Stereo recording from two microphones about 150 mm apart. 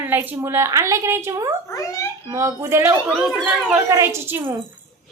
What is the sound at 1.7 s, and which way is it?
Speech, 15° left (ahead or behind).